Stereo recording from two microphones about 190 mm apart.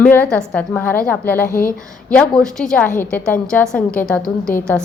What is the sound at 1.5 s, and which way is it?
Speech, 50° left (ahead or behind).